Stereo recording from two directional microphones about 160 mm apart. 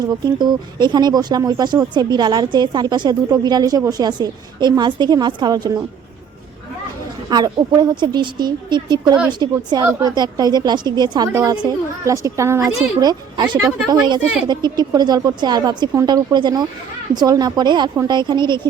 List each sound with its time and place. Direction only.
0.3 s speech: 30° right (ahead or behind)
7.3 s speech: 25° right (ahead or behind)